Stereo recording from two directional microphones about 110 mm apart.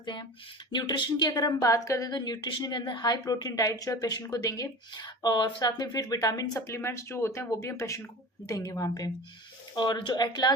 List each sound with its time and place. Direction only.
0.0 s a woman's voice: 45° left (ahead or behind)
9.7 s a woman's voice: 45° left (ahead or behind)